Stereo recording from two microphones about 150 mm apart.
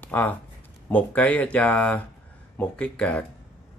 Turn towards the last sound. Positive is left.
turn(degrees=10)  # may be behind; listen again after turning